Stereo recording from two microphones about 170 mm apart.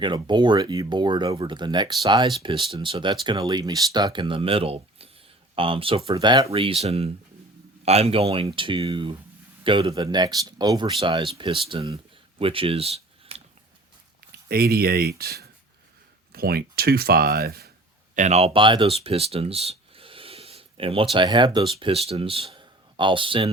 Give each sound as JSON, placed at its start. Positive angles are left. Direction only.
{"t": 0.0, "sound": "speech", "side_deg": -25}
{"t": 14.4, "sound": "speech", "side_deg": -65}
{"t": 18.1, "sound": "speech", "side_deg": -45}